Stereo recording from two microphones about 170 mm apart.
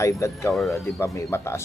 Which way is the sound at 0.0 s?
15° left (ahead or behind).